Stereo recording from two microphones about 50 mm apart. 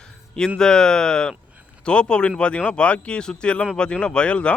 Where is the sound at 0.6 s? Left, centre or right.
Centre.